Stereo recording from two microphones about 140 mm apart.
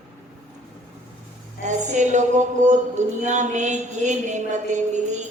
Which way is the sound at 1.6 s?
60° right (ahead or behind).